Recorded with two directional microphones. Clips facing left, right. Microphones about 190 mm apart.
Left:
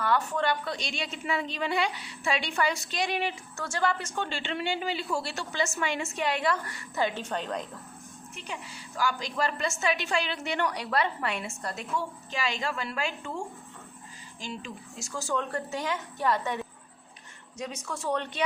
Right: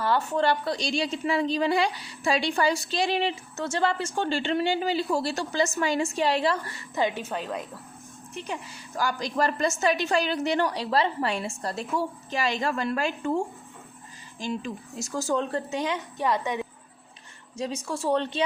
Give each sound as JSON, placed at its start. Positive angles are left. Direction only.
{"t": 0.0, "sound": "a woman's voice", "side_deg": -30}
{"t": 7.2, "sound": "a woman's voice", "side_deg": -5}
{"t": 9.0, "sound": "a woman's voice", "side_deg": -40}
{"t": 14.4, "sound": "a woman's voice", "side_deg": -40}
{"t": 15.5, "sound": "a woman's voice", "side_deg": -20}
{"t": 17.6, "sound": "speech", "side_deg": -30}